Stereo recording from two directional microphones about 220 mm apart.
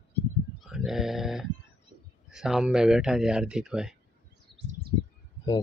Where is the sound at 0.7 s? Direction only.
Centre (ahead or behind).